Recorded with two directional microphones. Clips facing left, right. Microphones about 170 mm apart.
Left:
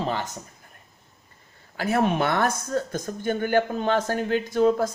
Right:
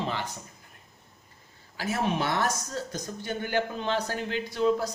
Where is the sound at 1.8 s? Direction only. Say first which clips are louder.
Left 6 dB; 60° left (ahead or behind).